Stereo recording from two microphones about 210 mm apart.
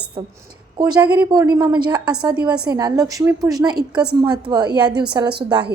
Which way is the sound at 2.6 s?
15° right (ahead or behind).